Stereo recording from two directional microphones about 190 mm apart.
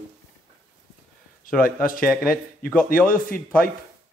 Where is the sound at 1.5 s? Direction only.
45° left (ahead or behind).